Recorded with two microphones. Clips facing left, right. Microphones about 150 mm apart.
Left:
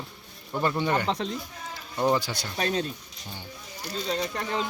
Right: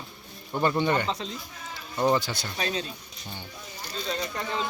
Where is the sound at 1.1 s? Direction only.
60° left (ahead or behind).